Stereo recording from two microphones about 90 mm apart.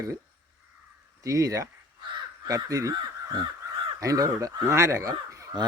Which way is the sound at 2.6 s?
40° right (ahead or behind).